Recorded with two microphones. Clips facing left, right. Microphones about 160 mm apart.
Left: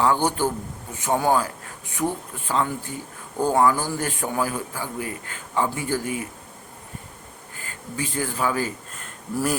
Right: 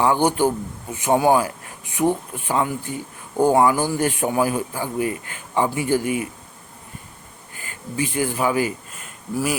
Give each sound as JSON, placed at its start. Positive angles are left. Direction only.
{"t": 0.0, "sound": "a man's voice", "side_deg": -15}
{"t": 7.9, "sound": "a man's voice", "side_deg": -15}